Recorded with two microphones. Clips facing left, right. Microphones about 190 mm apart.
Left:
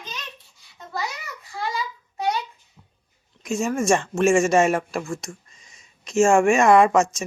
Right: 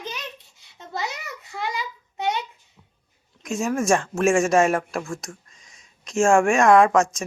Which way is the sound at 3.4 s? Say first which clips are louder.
Left 1 dB; centre (ahead or behind).